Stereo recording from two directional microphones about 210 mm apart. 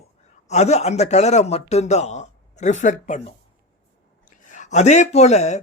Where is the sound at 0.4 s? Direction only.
35° left (ahead or behind).